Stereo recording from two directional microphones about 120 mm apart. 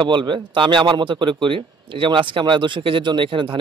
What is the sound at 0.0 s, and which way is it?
Speech, 40° right (ahead or behind).